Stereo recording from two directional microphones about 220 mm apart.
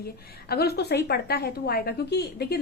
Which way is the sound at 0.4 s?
45° left (ahead or behind).